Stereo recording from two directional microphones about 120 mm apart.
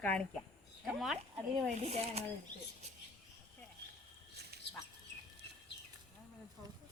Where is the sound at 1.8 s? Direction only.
60° right (ahead or behind).